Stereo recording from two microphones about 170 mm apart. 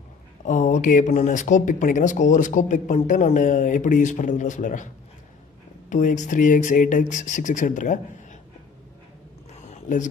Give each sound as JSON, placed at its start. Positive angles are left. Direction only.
{"t": 0.5, "sound": "speech", "side_deg": 50}
{"t": 5.9, "sound": "speech", "side_deg": 45}
{"t": 9.7, "sound": "a sound", "side_deg": 45}